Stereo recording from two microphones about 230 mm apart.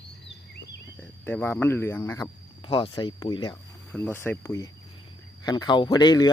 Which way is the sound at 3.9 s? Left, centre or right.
Centre.